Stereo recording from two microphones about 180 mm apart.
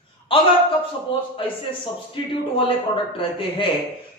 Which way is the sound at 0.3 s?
30° left (ahead or behind).